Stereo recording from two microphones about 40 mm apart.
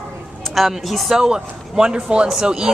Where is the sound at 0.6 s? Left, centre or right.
Centre.